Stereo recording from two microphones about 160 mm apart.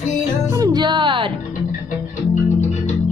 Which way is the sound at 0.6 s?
25° right (ahead or behind).